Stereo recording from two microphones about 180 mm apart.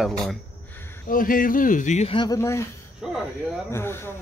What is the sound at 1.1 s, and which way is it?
Speech, 50° left (ahead or behind).